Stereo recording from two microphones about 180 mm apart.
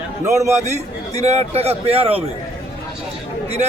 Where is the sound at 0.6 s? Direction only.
40° right (ahead or behind).